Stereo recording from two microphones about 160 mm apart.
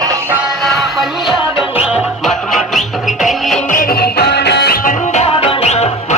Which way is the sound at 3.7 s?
65° left (ahead or behind).